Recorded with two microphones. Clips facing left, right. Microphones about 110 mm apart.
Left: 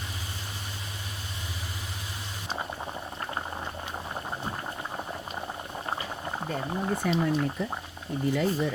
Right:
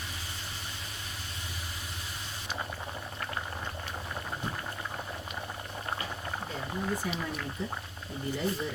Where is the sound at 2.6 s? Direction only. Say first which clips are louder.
Left 3 dB; 25° left (ahead or behind).